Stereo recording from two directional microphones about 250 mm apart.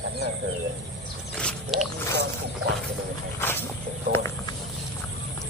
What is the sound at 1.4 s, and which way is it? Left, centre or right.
Speech, centre.